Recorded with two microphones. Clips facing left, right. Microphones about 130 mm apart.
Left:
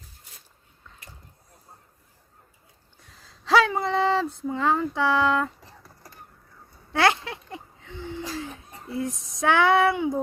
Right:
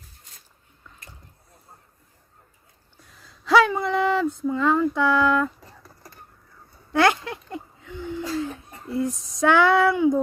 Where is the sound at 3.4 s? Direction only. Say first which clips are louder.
Right 2 dB; 25° left (ahead or behind).